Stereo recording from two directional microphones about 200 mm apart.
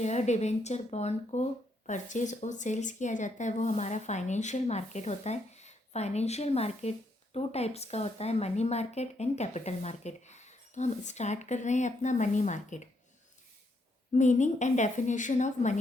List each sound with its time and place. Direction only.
0.0 s speech: 35° left (ahead or behind)
14.1 s speech: 35° left (ahead or behind)